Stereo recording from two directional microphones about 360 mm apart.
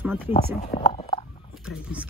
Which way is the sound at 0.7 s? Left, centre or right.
Centre.